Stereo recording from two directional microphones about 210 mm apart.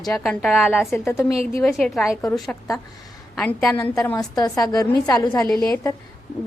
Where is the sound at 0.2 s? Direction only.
Centre (ahead or behind).